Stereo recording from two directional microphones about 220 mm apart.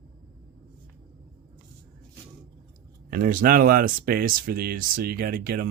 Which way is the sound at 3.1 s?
40° right (ahead or behind).